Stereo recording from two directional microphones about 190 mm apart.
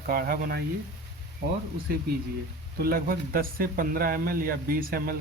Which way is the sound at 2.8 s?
50° right (ahead or behind).